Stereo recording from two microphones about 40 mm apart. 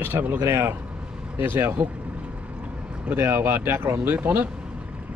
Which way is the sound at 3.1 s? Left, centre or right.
Right.